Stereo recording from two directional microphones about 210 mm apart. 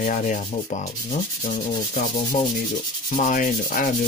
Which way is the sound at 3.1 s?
40° left (ahead or behind).